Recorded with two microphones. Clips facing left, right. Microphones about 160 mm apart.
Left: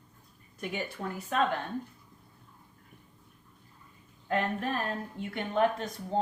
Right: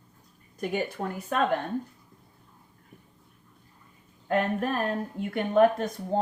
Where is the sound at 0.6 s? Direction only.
45° right (ahead or behind).